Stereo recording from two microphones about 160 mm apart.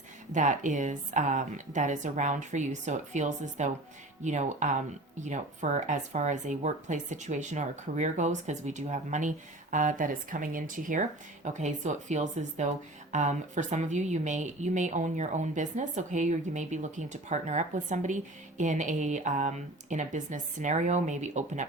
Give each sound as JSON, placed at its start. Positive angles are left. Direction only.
{"t": 0.3, "sound": "speech", "side_deg": -50}